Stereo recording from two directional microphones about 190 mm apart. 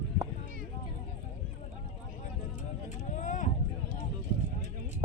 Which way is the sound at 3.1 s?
40° left (ahead or behind).